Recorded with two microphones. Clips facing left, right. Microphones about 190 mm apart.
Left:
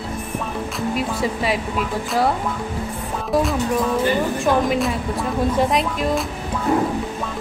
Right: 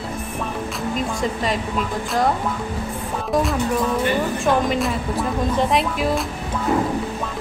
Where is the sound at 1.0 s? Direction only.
5° left (ahead or behind).